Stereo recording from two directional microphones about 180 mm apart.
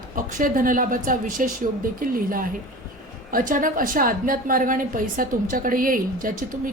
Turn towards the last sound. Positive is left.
turn(degrees=-50)  # may be behind; listen again after turning